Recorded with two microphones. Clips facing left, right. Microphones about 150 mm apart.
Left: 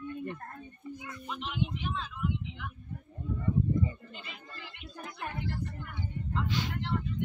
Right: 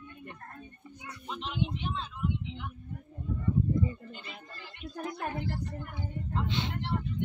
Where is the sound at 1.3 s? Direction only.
25° right (ahead or behind).